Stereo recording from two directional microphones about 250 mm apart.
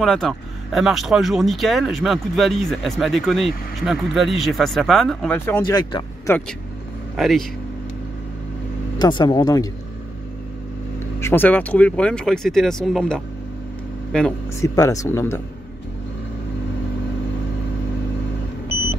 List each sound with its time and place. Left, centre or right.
0.0 s speech: centre
7.2 s speech: centre
8.9 s speech: centre
11.1 s speech: centre